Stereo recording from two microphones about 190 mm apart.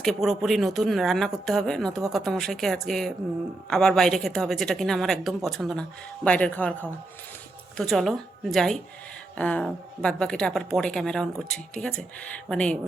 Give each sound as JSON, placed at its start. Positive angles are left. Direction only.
{"t": 0.0, "sound": "speech", "side_deg": 0}